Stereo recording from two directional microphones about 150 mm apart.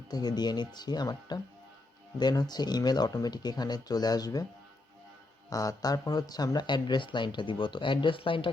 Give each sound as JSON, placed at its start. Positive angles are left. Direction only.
{"t": 0.1, "sound": "speech", "side_deg": 25}
{"t": 5.5, "sound": "speech", "side_deg": 25}